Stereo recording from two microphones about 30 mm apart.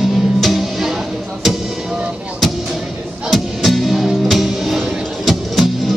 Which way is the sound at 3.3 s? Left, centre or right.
Centre.